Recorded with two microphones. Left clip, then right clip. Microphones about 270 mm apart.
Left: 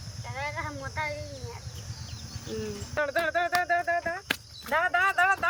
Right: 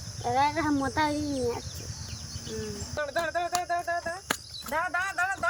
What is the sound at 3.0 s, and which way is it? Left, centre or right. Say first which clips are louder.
Speech: left 3 dB; centre.